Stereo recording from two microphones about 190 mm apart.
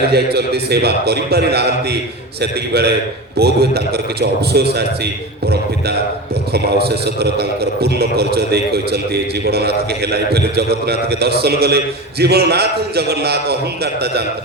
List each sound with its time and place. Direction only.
0.1 s a man's voice: 60° right (ahead or behind)
6.5 s a man's voice: 55° right (ahead or behind)